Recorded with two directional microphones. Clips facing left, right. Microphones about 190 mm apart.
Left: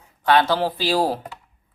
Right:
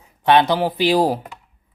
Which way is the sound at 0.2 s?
20° right (ahead or behind).